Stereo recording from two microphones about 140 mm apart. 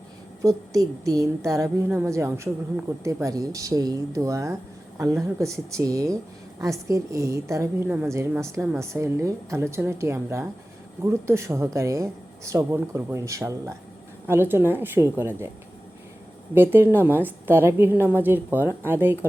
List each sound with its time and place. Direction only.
0.4 s a woman's voice: 25° right (ahead or behind)
16.6 s a woman's voice: 15° right (ahead or behind)